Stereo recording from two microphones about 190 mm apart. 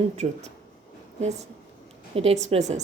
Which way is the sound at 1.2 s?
35° right (ahead or behind).